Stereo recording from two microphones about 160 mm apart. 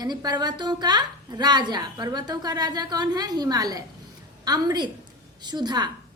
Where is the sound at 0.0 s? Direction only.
25° right (ahead or behind).